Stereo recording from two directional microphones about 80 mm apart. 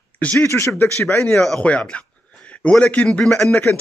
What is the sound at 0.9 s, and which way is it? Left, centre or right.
A man's voice, centre.